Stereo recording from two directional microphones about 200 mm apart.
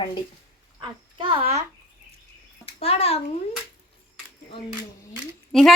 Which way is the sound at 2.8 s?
30° left (ahead or behind).